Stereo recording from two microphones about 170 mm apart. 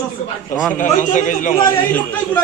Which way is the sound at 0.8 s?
50° left (ahead or behind).